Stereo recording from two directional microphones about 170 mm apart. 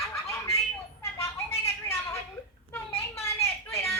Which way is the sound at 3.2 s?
15° left (ahead or behind).